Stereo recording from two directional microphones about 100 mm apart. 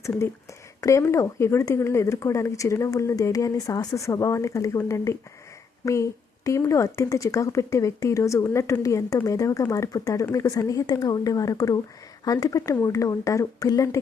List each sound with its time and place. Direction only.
0.8 s speech: 30° left (ahead or behind)